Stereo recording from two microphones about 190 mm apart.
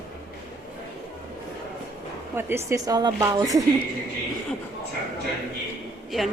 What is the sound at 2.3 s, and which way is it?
A woman's voice, 15° right (ahead or behind).